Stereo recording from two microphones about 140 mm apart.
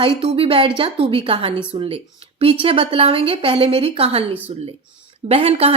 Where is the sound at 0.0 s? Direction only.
40° right (ahead or behind).